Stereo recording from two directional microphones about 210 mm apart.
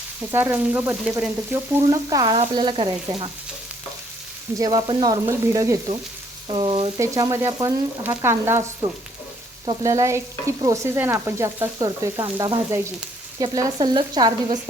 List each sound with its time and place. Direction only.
0.3 s stir: 10° right (ahead or behind)
2.4 s frying: 25° right (ahead or behind)
4.5 s stir: 20° right (ahead or behind)
6.5 s frying: 25° right (ahead or behind)
7.0 s stir: 15° right (ahead or behind)
13.4 s frying: 15° right (ahead or behind)